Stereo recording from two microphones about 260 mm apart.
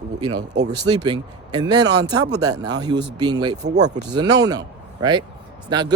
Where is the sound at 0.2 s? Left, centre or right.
Centre.